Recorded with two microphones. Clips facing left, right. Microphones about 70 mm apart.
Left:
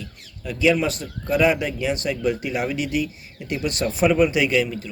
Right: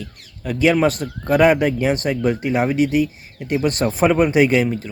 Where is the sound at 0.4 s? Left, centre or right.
Right.